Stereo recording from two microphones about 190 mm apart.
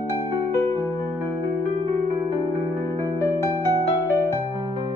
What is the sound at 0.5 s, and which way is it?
Music, 15° left (ahead or behind).